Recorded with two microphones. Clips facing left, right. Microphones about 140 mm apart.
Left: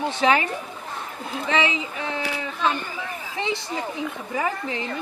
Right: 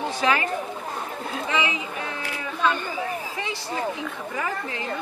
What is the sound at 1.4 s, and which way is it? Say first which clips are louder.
Speech: left 4 dB; 30° left (ahead or behind).